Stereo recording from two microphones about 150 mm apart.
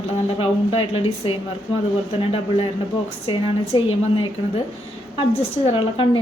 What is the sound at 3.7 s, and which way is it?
Speech, 35° left (ahead or behind).